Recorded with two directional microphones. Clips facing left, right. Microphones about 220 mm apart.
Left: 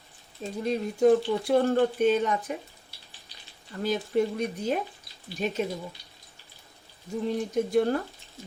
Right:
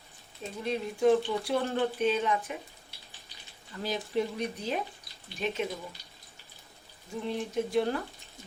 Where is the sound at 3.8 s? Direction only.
50° left (ahead or behind).